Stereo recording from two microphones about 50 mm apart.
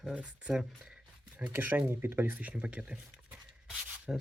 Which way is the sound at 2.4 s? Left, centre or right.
Right.